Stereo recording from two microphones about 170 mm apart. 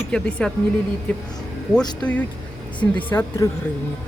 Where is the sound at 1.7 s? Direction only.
5° left (ahead or behind).